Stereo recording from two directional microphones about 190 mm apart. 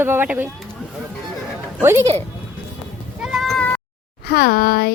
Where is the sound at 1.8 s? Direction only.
10° right (ahead or behind).